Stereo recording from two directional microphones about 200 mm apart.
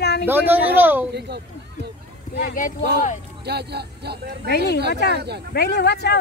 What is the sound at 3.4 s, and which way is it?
Speech, 55° right (ahead or behind).